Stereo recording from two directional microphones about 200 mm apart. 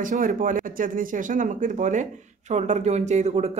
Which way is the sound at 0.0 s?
40° right (ahead or behind).